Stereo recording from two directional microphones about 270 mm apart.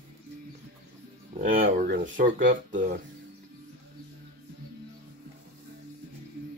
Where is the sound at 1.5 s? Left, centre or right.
Right.